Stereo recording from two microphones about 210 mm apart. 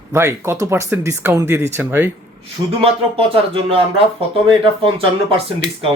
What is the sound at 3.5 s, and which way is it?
Speech, 25° right (ahead or behind).